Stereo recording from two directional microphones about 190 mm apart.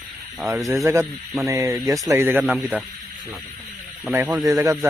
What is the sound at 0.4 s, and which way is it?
Speech, 15° right (ahead or behind).